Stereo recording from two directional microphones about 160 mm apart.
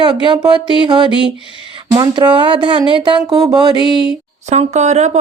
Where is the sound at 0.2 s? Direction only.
30° right (ahead or behind).